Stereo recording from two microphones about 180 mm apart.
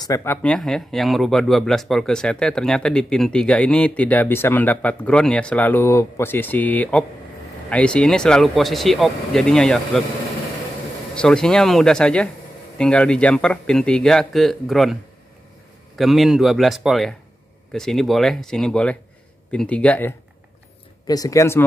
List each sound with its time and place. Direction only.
0.0 s speech: 15° left (ahead or behind)
11.1 s speech: 5° left (ahead or behind)
16.0 s speech: centre (ahead or behind); by 21.6 s 15° left (ahead or behind)